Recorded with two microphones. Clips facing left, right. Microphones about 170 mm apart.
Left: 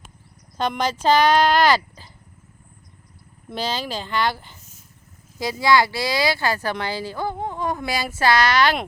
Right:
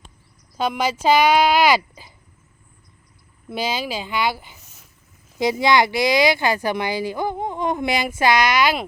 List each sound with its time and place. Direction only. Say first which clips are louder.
0.5 s speech: right 1 dB; 5° right (ahead or behind)
3.5 s speech: right 2 dB; 10° right (ahead or behind)
4.5 s dog: even; 75° right (ahead or behind)
5.4 s speech: right 1 dB; 20° right (ahead or behind)